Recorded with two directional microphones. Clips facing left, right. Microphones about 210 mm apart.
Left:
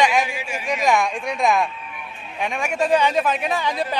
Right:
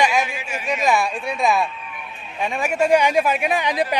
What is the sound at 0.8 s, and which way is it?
Speech, 5° right (ahead or behind).